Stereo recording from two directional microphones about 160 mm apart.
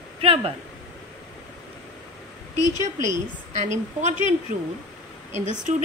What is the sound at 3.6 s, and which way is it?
Speech, 45° right (ahead or behind).